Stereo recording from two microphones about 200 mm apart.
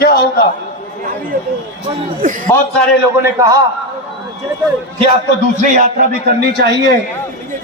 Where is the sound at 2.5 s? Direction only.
10° left (ahead or behind).